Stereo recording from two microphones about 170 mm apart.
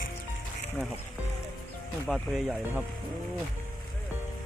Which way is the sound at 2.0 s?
5° right (ahead or behind).